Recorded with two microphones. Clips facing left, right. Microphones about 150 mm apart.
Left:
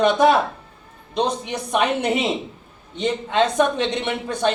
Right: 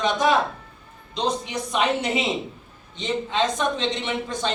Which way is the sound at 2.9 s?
60° left (ahead or behind).